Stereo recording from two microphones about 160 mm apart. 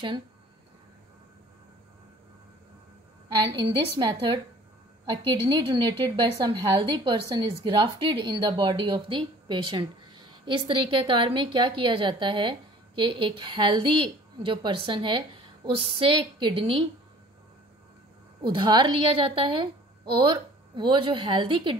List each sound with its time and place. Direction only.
3.5 s a woman's voice: 30° right (ahead or behind)
18.4 s a woman's voice: 30° right (ahead or behind)